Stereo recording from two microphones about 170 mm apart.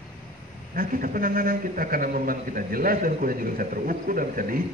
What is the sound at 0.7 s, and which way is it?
A man's voice, 55° right (ahead or behind).